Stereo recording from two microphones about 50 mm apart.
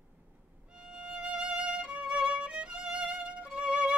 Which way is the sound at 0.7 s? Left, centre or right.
Centre.